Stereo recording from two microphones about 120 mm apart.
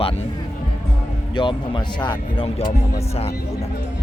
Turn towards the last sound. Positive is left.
turn(degrees=60)  # may be behind; listen again after turning